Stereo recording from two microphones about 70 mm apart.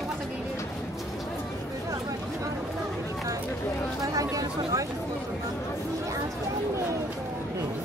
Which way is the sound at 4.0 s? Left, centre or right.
Right.